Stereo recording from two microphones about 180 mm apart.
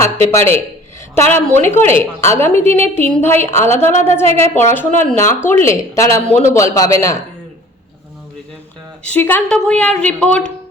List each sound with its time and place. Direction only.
0.0 s a woman's voice: 15° left (ahead or behind)
9.0 s a woman's voice: 10° left (ahead or behind)